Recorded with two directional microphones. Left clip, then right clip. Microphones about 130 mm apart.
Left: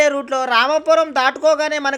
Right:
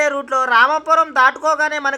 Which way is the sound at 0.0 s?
40° left (ahead or behind).